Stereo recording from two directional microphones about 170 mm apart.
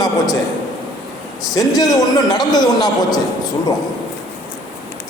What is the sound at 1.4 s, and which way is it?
A man's voice, 20° left (ahead or behind).